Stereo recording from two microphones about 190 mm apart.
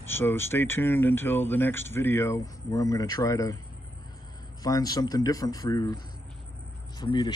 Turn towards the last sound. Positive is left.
turn(degrees=20)  # may be behind; listen again after turning